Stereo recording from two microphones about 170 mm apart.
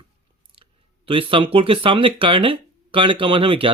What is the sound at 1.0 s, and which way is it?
Speech, 30° right (ahead or behind).